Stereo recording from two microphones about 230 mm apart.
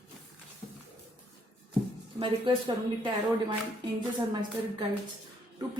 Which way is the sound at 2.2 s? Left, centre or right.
Right.